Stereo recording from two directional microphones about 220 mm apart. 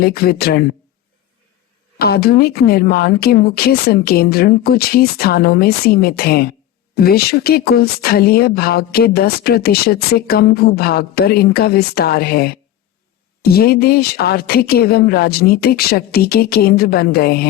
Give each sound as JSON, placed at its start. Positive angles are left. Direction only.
{"t": 0.0, "sound": "speech", "side_deg": 45}
{"t": 2.0, "sound": "speech", "side_deg": 45}